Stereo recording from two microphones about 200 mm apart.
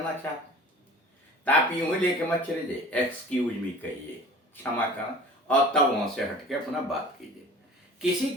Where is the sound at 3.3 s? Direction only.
5° left (ahead or behind).